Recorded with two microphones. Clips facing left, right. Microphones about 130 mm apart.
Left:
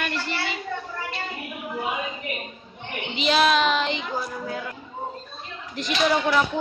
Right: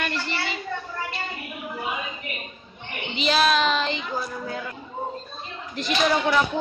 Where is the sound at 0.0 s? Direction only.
10° left (ahead or behind).